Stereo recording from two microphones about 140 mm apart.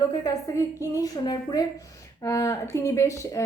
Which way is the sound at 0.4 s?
25° left (ahead or behind).